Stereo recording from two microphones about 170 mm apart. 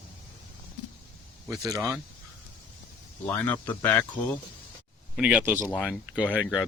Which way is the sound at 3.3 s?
10° left (ahead or behind).